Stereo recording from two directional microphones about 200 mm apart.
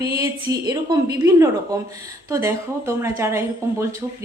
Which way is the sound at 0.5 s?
20° right (ahead or behind).